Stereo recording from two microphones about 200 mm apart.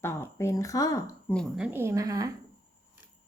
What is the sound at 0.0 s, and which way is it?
Speech, 10° left (ahead or behind).